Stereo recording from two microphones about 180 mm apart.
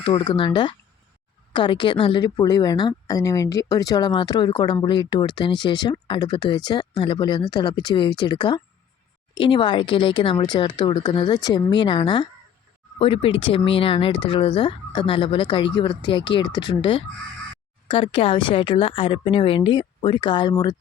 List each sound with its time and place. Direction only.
0.0 s a woman's voice: 30° left (ahead or behind)